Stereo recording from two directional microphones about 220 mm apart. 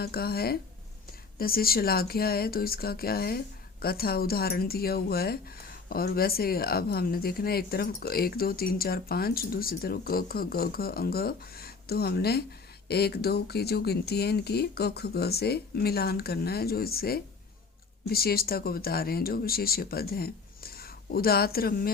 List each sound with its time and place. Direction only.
0.0 s speech: 45° left (ahead or behind)